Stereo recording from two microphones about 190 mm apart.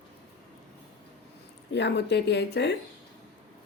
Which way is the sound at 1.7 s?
65° left (ahead or behind).